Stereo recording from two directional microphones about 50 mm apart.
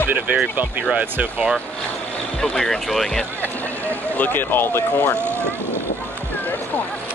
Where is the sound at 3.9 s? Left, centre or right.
Left.